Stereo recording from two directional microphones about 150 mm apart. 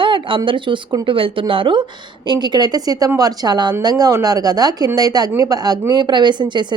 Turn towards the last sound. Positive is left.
turn(degrees=-30)  # may be behind; listen again after turning